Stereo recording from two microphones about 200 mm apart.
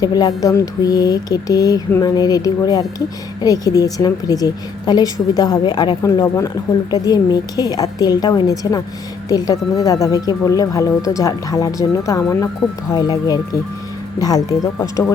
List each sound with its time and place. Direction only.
0.0 s a woman's voice: 20° left (ahead or behind)